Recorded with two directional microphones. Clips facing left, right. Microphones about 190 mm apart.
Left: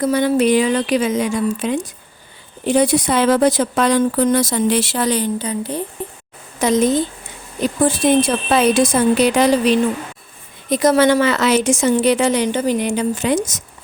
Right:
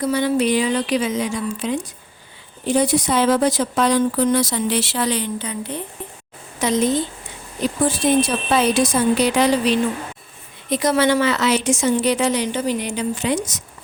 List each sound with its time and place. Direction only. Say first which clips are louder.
0.0 s speech: left 3 dB; 50° left (ahead or behind)
2.6 s speech: left 3 dB; 65° left (ahead or behind); by 7.0 s 45° left (ahead or behind)
8.2 s speech: left 3 dB; 55° left (ahead or behind)